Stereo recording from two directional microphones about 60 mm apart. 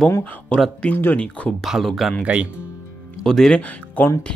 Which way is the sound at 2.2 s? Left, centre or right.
Right.